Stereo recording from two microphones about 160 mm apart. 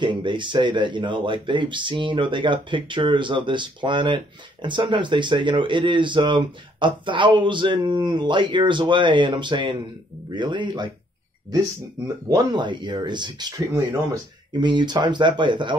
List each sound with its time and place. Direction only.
0.0 s speech: 30° right (ahead or behind)
12.3 s speech: 25° right (ahead or behind)
14.6 s speech: 30° right (ahead or behind)